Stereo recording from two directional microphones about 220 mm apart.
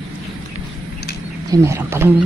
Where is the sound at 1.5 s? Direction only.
10° right (ahead or behind).